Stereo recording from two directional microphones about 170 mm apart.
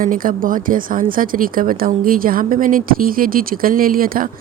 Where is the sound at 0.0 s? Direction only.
55° right (ahead or behind).